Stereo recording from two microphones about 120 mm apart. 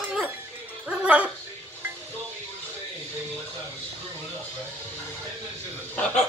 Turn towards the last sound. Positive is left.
turn(degrees=10)  # may be behind; listen again after turning